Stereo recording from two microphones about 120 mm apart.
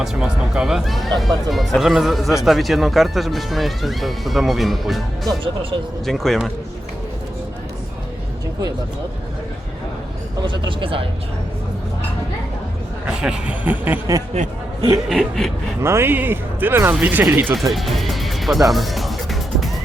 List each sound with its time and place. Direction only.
0.0 s speech: 5° right (ahead or behind)
10.4 s speech: 40° right (ahead or behind)
13.2 s speech: 10° right (ahead or behind)
14.4 s speech: 65° right (ahead or behind)
15.1 s speech: centre (ahead or behind)
15.8 s speech: 20° right (ahead or behind)
17.5 s music: centre (ahead or behind)